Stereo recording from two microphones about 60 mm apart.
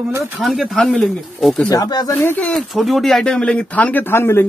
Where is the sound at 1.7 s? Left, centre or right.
Left.